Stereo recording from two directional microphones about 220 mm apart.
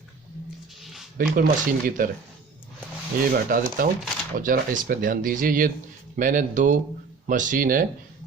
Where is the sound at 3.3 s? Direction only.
40° right (ahead or behind).